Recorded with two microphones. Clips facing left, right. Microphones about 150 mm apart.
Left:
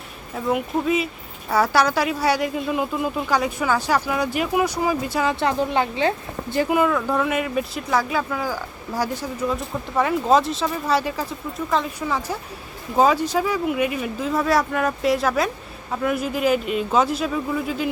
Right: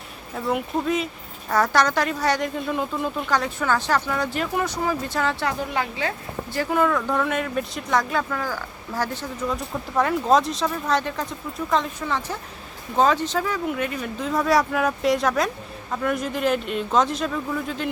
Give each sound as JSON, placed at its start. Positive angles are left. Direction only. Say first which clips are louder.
{"t": 0.3, "sound": "speech", "louder": "left 2 dB", "side_deg": 0}
{"t": 5.5, "sound": "speech", "louder": "left 5 dB", "side_deg": 25}
{"t": 6.7, "sound": "speech", "louder": "right 1 dB", "side_deg": 5}